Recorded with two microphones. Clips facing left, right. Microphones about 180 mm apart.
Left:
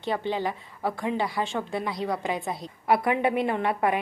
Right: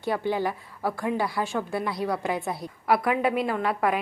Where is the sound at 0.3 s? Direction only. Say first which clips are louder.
Right 1 dB; 15° left (ahead or behind).